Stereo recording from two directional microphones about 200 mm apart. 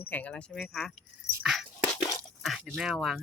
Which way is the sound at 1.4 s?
Centre (ahead or behind).